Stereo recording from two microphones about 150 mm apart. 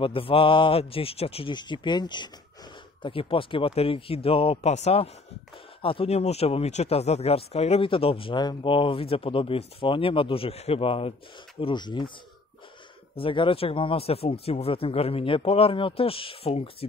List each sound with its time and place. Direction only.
0.0 s speech: 35° left (ahead or behind)
13.1 s speech: 35° left (ahead or behind)